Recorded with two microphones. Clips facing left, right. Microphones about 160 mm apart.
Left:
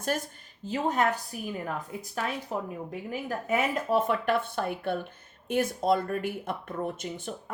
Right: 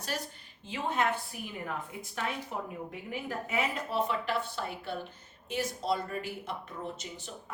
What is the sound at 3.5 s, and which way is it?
Speech, 45° left (ahead or behind).